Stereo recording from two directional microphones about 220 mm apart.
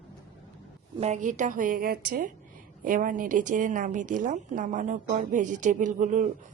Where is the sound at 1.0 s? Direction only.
30° right (ahead or behind).